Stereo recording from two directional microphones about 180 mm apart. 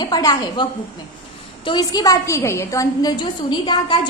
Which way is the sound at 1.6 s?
25° left (ahead or behind).